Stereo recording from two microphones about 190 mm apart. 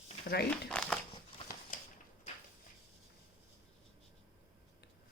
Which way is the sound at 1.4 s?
25° left (ahead or behind).